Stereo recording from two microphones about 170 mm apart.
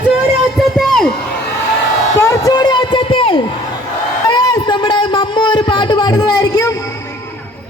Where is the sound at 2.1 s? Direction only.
20° left (ahead or behind).